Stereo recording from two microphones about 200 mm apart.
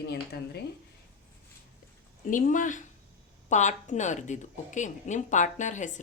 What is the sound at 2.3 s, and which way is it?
Speech, 40° left (ahead or behind).